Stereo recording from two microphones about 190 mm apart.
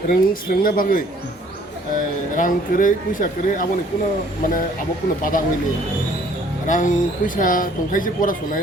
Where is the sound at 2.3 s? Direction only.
45° left (ahead or behind).